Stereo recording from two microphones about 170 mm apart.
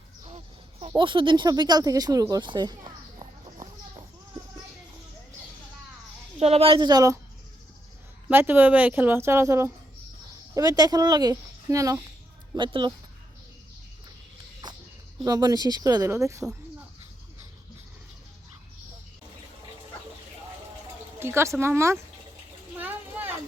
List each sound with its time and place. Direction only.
0.3 s speech: 35° right (ahead or behind)
3.2 s clip-clop: 25° right (ahead or behind)
6.4 s speech: 35° right (ahead or behind); by 7.2 s 20° right (ahead or behind)
8.3 s a woman's voice: 10° right (ahead or behind); by 12.9 s 30° right (ahead or behind)
14.6 s a sound: 25° right (ahead or behind)
15.2 s speech: 20° right (ahead or behind)
21.2 s a woman's voice: 15° right (ahead or behind)
22.8 s a sound: 10° right (ahead or behind)